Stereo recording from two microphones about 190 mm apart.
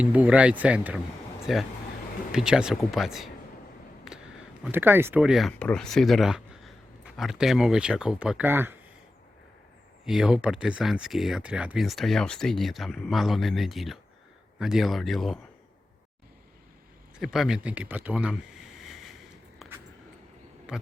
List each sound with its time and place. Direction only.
0.0 s speech: 5° right (ahead or behind)
4.1 s a sound: 5° right (ahead or behind)
4.6 s speech: 10° right (ahead or behind)
10.1 s speech: 5° right (ahead or behind)
17.2 s speech: centre (ahead or behind)
20.7 s speech: 5° right (ahead or behind)